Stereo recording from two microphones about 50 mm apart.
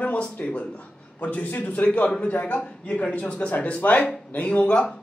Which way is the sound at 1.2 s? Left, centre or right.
Left.